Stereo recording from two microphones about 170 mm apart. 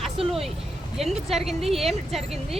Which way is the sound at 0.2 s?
35° right (ahead or behind).